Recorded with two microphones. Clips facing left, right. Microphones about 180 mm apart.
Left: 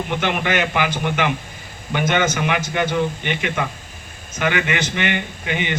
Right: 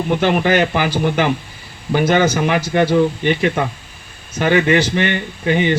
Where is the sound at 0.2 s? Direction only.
35° right (ahead or behind).